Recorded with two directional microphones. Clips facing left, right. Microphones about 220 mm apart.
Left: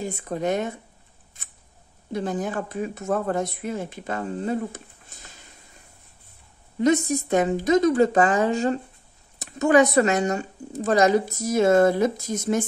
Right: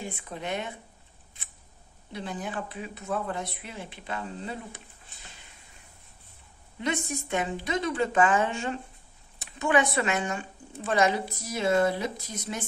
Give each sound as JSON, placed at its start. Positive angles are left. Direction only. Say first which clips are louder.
{"t": 0.0, "sound": "speech", "louder": "left 10 dB", "side_deg": 40}
{"t": 1.4, "sound": "scissors", "louder": "left 3 dB", "side_deg": 45}
{"t": 2.1, "sound": "speech", "louder": "left 8 dB", "side_deg": 45}
{"t": 6.8, "sound": "a woman's voice", "louder": "left 11 dB", "side_deg": 40}